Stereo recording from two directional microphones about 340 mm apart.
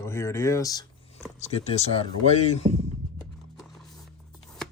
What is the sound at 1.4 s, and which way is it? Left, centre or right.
Speech, centre.